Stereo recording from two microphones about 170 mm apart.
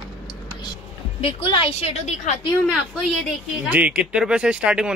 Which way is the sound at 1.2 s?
35° left (ahead or behind).